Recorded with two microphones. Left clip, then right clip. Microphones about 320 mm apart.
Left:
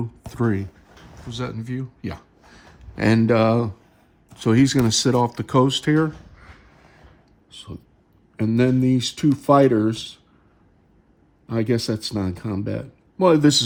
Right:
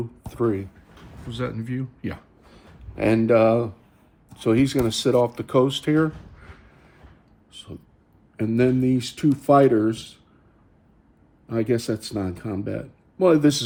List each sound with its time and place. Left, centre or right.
0.3 s speech: left
1.3 s speech: centre
2.9 s speech: left
7.5 s speech: left
11.4 s speech: left